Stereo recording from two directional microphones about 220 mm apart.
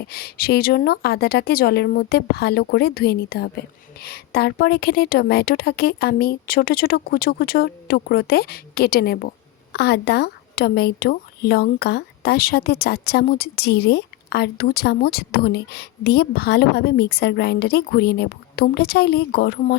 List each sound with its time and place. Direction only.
0.0 s speech: 45° left (ahead or behind)